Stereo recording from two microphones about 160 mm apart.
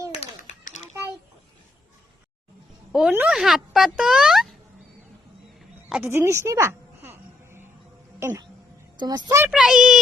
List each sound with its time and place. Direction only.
0.1 s a sound: 40° left (ahead or behind)
2.9 s speech: 10° right (ahead or behind)
6.1 s music: 15° right (ahead or behind)
9.0 s speech: 25° right (ahead or behind)
9.5 s speech: centre (ahead or behind)